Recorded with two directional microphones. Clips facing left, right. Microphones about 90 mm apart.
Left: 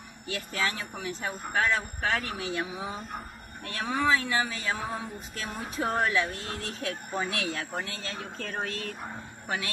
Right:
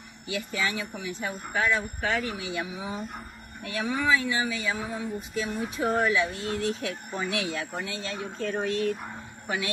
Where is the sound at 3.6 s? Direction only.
40° left (ahead or behind).